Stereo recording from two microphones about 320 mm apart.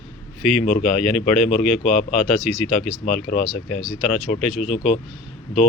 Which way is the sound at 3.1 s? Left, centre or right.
Left.